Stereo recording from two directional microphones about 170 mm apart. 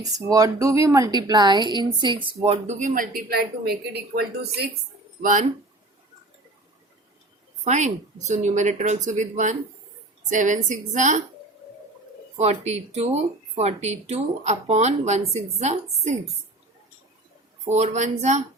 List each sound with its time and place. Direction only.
0.3 s a woman's voice: 20° right (ahead or behind); by 4.3 s 65° right (ahead or behind)
5.2 s a woman's voice: 50° right (ahead or behind)
7.6 s a woman's voice: 45° right (ahead or behind)
12.4 s speech: 40° right (ahead or behind)
17.7 s a woman's voice: 40° right (ahead or behind)